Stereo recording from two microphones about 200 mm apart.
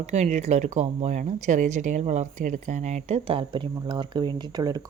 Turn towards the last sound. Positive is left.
turn(degrees=-20)  # may be behind; listen again after turning